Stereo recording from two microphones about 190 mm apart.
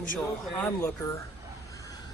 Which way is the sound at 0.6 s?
15° left (ahead or behind).